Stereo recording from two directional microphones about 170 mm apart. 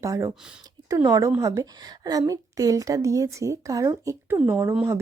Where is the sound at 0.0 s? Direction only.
15° right (ahead or behind).